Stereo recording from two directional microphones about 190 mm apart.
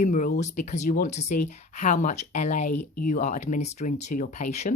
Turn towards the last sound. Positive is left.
turn(degrees=35)  # may be behind; listen again after turning